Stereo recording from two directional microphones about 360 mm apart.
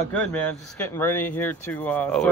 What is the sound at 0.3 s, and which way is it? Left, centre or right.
Speech, centre.